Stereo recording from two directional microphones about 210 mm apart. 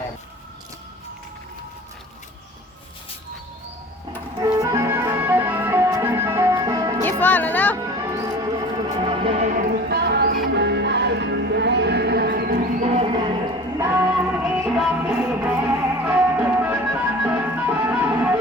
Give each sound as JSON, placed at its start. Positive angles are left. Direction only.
{"t": 4.4, "sound": "music", "side_deg": -15}
{"t": 7.0, "sound": "music", "side_deg": 10}
{"t": 7.8, "sound": "music", "side_deg": -15}
{"t": 13.7, "sound": "music", "side_deg": -10}